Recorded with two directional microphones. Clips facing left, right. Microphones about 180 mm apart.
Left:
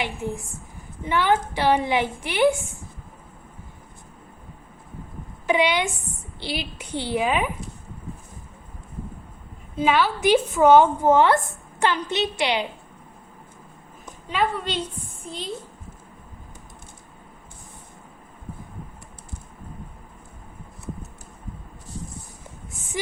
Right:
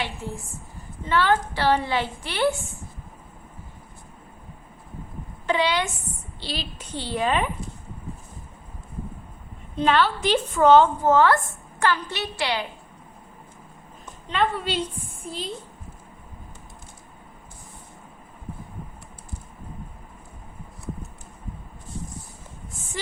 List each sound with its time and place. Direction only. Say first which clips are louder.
0.0 s a woman's voice: left 3 dB; 15° left (ahead or behind)
5.5 s a woman's voice: left 2 dB; 15° left (ahead or behind)
9.7 s a woman's voice: even; 10° left (ahead or behind)
14.0 s a sound: even; 5° left (ahead or behind)
15.2 s a child's voice: even; 5° right (ahead or behind)